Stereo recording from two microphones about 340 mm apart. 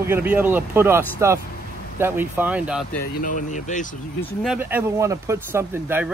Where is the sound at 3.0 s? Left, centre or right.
Left.